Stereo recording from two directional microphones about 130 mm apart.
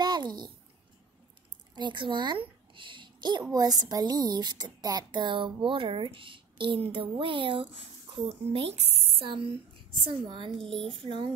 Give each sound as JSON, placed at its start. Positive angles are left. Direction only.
{"t": 0.0, "sound": "a sound", "side_deg": -35}
{"t": 1.8, "sound": "speech", "side_deg": -35}
{"t": 2.7, "sound": "babbling", "side_deg": -40}
{"t": 3.5, "sound": "speech", "side_deg": -30}
{"t": 10.6, "sound": "speech", "side_deg": 5}
{"t": 11.0, "sound": "speech", "side_deg": -40}